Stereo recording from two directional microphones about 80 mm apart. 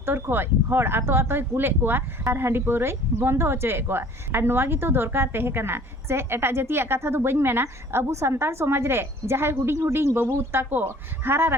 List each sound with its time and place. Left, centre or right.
0.0 s speech: right